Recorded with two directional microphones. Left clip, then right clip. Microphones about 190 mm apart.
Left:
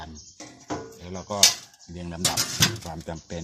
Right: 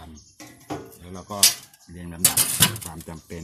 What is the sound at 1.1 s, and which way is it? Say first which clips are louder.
Speech: left 1 dB; 35° left (ahead or behind).